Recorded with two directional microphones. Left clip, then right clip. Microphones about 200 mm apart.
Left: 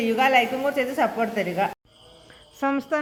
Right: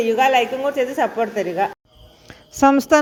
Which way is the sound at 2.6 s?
35° right (ahead or behind).